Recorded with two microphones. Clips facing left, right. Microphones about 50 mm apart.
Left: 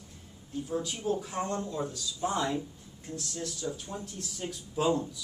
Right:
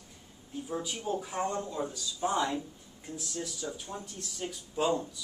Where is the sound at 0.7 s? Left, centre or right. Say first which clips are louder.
Left 2 dB; centre.